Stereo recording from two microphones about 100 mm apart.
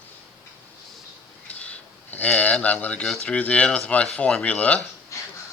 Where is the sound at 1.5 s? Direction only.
15° left (ahead or behind).